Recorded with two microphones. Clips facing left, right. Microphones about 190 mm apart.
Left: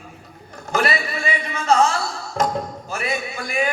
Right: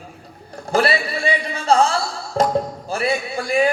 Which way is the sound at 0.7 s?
35° right (ahead or behind).